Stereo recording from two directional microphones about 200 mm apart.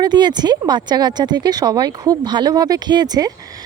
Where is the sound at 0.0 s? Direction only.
20° right (ahead or behind).